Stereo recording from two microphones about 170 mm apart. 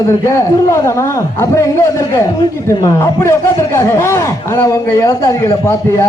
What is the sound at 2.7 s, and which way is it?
A man's voice, 20° left (ahead or behind).